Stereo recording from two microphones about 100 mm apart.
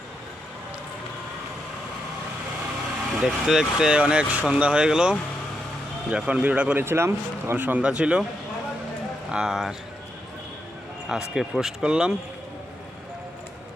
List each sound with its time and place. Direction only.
3.2 s speech: 5° right (ahead or behind)
6.8 s speech: 25° right (ahead or behind); by 8.3 s 10° right (ahead or behind)
9.3 s speech: 5° right (ahead or behind)
11.1 s speech: 5° right (ahead or behind)